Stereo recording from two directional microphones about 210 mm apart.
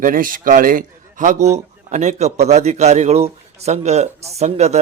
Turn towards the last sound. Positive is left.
turn(degrees=-30)  # may be behind; listen again after turning